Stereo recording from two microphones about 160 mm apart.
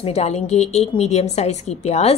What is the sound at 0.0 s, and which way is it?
A woman's voice, 40° left (ahead or behind).